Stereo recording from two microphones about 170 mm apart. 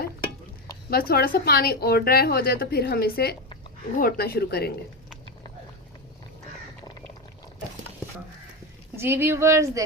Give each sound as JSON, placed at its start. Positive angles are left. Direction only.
{"t": 0.9, "sound": "a woman's voice", "side_deg": 65}
{"t": 9.0, "sound": "speech", "side_deg": -15}